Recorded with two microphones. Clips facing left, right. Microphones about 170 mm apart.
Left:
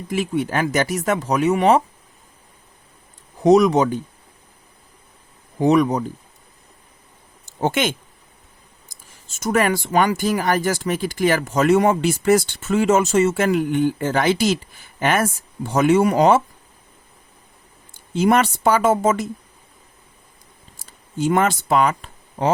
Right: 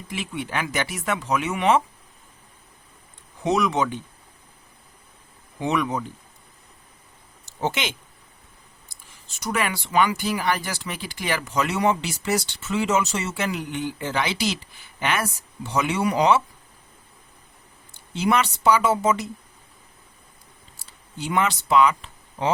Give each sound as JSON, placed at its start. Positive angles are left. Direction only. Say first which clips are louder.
{"t": 0.1, "sound": "speech", "louder": "left 8 dB", "side_deg": 40}
{"t": 3.4, "sound": "speech", "louder": "left 9 dB", "side_deg": 40}
{"t": 5.5, "sound": "speech", "louder": "left 8 dB", "side_deg": 40}
{"t": 7.6, "sound": "speech", "louder": "left 6 dB", "side_deg": 50}
{"t": 17.9, "sound": "speech", "louder": "left 5 dB", "side_deg": 50}
{"t": 20.7, "sound": "a sound", "louder": "left 11 dB", "side_deg": 45}